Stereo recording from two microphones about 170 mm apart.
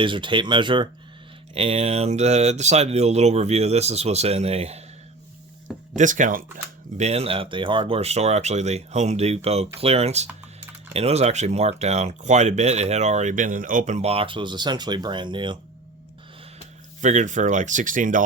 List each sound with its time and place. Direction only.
0.0 s speech: 30° right (ahead or behind)
6.0 s speech: 50° right (ahead or behind)
6.9 s speech: 40° right (ahead or behind)
17.0 s speech: 45° right (ahead or behind)